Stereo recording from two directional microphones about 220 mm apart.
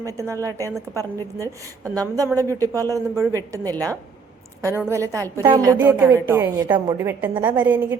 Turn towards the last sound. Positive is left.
turn(degrees=-10)  # may be behind; listen again after turning